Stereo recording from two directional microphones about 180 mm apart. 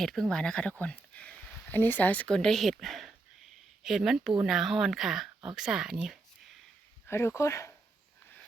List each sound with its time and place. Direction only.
0.0 s speech: centre (ahead or behind)
7.1 s speech: 15° left (ahead or behind)